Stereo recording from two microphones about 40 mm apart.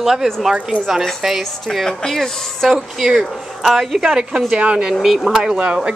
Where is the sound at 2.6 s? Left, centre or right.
Centre.